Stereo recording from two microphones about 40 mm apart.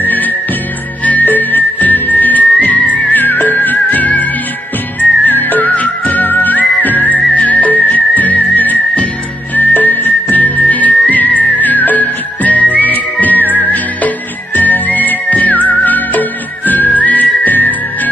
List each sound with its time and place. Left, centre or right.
0.0 s music: left
3.1 s music: left
9.6 s whistling: left